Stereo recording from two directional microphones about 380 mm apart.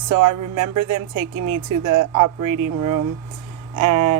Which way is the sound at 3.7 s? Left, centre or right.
Right.